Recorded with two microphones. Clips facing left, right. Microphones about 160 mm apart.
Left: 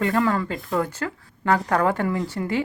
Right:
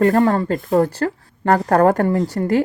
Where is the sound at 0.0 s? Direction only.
40° right (ahead or behind).